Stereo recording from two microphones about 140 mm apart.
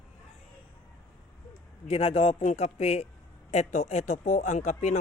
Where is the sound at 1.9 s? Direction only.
45° left (ahead or behind).